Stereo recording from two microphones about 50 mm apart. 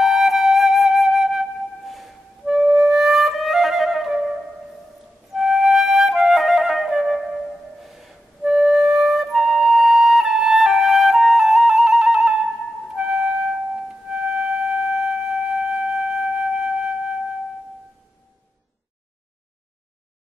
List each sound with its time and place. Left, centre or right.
0.0 s flute: centre
5.3 s flute: centre
7.8 s a sound: centre
8.5 s flute: centre
12.9 s music: centre